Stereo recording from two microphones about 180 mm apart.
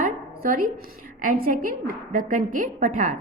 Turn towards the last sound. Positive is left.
turn(degrees=-45)  # may be behind; listen again after turning